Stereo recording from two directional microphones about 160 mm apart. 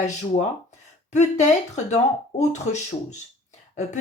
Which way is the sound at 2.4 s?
45° left (ahead or behind).